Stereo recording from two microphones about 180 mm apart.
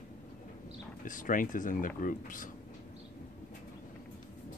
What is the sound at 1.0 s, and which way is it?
Speech, 45° left (ahead or behind).